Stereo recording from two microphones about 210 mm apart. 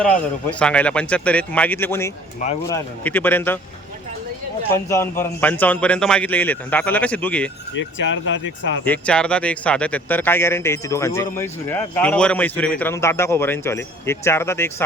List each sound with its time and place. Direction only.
0.6 s speech: 5° left (ahead or behind)
4.7 s speech: 15° left (ahead or behind)
7.8 s speech: 60° left (ahead or behind)
8.8 s speech: 5° left (ahead or behind)